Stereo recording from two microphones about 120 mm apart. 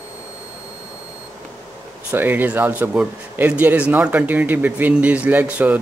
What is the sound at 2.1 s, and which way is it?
Speech, 15° right (ahead or behind).